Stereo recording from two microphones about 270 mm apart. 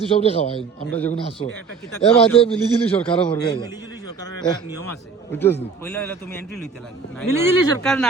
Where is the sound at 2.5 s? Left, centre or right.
Centre.